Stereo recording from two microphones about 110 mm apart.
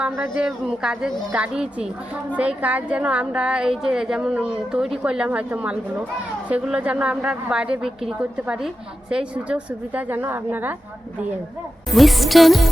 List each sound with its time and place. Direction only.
0.0 s a woman's voice: 10° right (ahead or behind)
11.9 s music: centre (ahead or behind)